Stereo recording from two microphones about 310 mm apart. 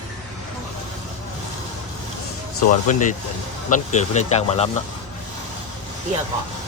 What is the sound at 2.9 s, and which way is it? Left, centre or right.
Speech, left.